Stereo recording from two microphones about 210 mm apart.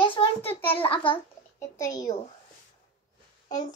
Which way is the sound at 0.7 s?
25° left (ahead or behind).